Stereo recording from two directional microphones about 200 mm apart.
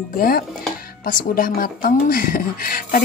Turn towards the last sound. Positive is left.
turn(degrees=45)  # may be behind; listen again after turning